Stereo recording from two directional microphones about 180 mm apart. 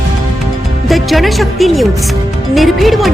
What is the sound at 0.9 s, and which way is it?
A woman's voice, centre (ahead or behind).